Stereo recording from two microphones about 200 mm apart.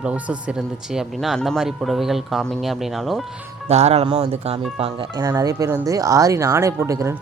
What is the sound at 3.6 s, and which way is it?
Speech, 30° right (ahead or behind).